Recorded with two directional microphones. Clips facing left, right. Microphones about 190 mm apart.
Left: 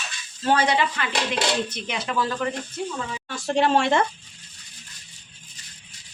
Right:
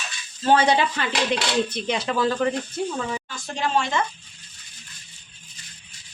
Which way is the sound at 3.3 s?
65° left (ahead or behind).